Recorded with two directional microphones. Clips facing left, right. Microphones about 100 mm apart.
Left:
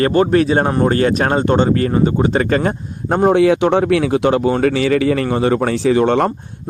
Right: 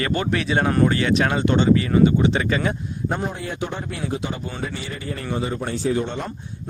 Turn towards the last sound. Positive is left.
turn(degrees=85)